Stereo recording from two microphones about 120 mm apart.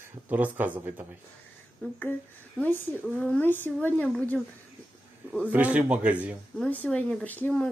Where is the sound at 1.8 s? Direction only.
15° left (ahead or behind).